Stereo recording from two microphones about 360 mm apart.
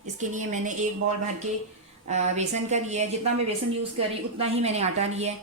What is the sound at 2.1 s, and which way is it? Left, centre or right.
A woman's voice, centre.